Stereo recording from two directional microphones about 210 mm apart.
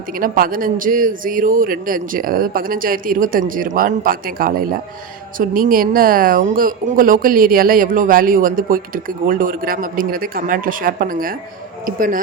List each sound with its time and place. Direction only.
0.2 s a woman's voice: 40° right (ahead or behind)